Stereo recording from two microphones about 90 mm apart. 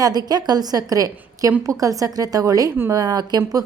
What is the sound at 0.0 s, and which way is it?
A woman's voice, 45° right (ahead or behind).